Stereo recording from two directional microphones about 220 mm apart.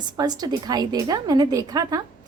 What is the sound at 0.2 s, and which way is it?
A woman's voice, 20° right (ahead or behind).